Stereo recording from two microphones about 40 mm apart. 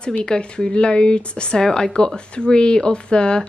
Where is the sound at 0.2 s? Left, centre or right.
Centre.